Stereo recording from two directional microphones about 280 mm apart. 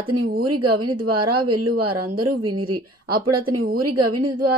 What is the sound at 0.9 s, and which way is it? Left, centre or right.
Speech, centre.